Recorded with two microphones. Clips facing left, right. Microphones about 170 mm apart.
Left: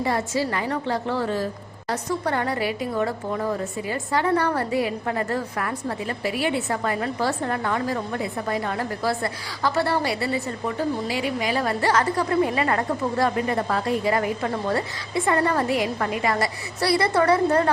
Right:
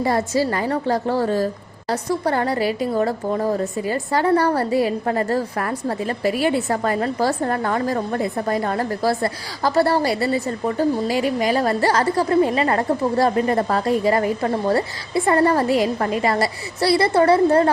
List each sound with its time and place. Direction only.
0.0 s a woman's voice: 40° right (ahead or behind)